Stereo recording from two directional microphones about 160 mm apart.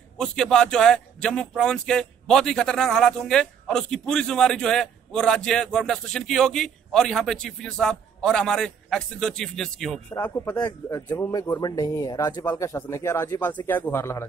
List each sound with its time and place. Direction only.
0.2 s speech: 5° left (ahead or behind)
10.1 s speech: 15° left (ahead or behind)